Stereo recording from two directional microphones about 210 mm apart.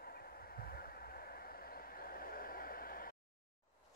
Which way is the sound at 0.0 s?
45° left (ahead or behind).